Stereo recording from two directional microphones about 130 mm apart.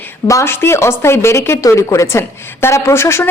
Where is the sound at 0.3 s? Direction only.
20° left (ahead or behind).